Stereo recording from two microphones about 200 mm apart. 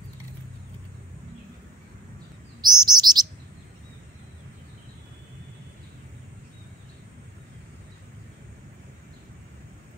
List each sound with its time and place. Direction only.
2.6 s chirp: 20° right (ahead or behind)